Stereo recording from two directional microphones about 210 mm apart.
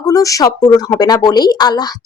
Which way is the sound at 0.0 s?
15° left (ahead or behind).